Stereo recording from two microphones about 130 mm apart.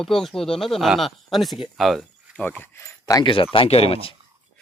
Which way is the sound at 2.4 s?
15° left (ahead or behind).